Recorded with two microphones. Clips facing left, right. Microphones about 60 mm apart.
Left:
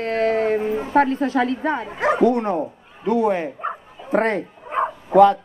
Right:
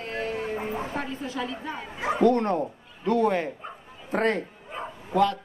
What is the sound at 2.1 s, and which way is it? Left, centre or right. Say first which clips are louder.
Speech: left 1 dB; centre.